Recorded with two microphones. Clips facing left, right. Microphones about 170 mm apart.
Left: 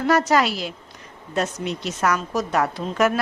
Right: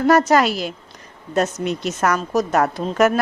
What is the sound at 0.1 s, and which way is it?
Speech, 45° right (ahead or behind).